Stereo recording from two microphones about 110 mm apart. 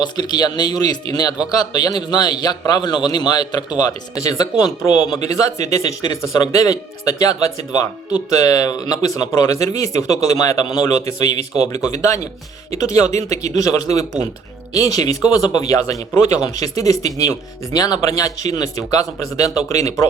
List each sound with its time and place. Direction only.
0.0 s speech: 40° left (ahead or behind)
13.1 s speech: 90° right
13.5 s speech: 30° left (ahead or behind)